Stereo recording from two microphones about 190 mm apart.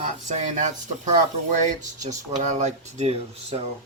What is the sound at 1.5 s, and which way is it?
Speech, 40° right (ahead or behind).